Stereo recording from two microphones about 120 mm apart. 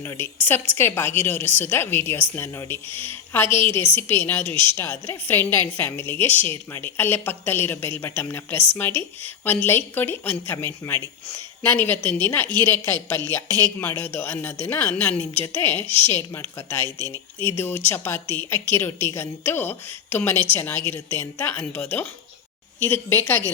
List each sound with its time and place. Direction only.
0.0 s a woman's voice: 20° left (ahead or behind)
4.4 s speech: 45° right (ahead or behind)
4.8 s a woman's voice: 20° left (ahead or behind)